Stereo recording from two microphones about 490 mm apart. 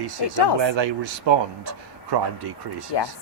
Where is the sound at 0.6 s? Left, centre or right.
Right.